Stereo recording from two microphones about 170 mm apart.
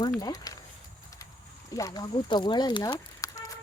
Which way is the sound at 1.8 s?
20° left (ahead or behind).